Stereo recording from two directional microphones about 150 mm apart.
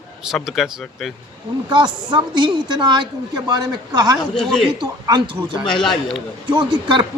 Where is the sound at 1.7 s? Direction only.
30° right (ahead or behind).